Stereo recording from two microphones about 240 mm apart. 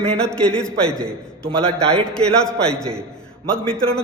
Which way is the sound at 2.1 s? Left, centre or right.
Centre.